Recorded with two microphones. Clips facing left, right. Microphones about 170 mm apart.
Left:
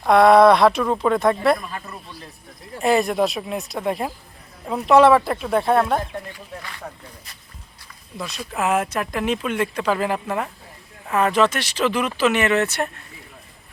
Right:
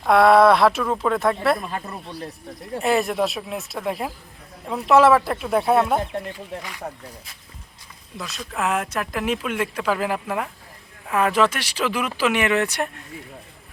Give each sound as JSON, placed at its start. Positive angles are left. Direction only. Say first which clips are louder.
{"t": 0.1, "sound": "speech", "louder": "left 2 dB", "side_deg": -5}
{"t": 1.5, "sound": "speech", "louder": "right 3 dB", "side_deg": -30}
{"t": 2.8, "sound": "speech", "louder": "left 2 dB", "side_deg": 0}
{"t": 8.2, "sound": "speech", "louder": "left 2 dB", "side_deg": 0}